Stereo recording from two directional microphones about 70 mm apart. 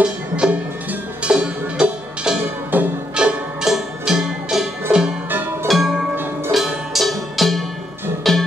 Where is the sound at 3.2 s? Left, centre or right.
Centre.